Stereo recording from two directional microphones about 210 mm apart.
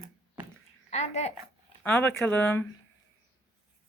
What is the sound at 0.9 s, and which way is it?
Speech, 30° left (ahead or behind).